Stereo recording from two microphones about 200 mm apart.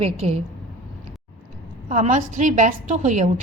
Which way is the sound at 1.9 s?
40° right (ahead or behind).